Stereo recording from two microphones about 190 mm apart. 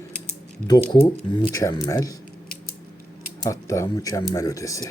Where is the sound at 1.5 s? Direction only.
15° left (ahead or behind).